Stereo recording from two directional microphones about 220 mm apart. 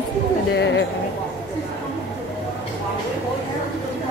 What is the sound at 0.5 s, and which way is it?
Speech, 55° left (ahead or behind).